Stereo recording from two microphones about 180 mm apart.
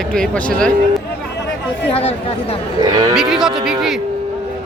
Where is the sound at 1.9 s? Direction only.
35° left (ahead or behind).